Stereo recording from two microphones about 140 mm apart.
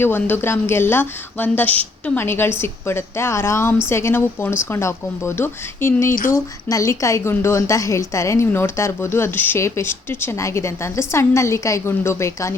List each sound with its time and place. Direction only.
0.0 s a woman's voice: 15° left (ahead or behind)